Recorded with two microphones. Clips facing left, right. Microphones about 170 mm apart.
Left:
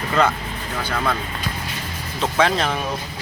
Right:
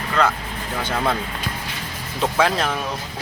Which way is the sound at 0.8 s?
20° right (ahead or behind).